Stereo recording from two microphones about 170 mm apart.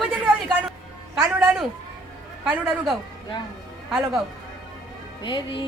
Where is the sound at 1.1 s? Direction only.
15° right (ahead or behind).